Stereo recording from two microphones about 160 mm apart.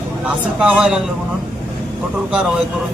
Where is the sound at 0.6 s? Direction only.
5° right (ahead or behind).